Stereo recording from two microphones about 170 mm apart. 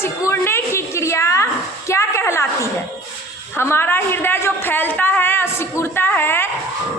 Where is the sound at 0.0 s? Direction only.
15° left (ahead or behind).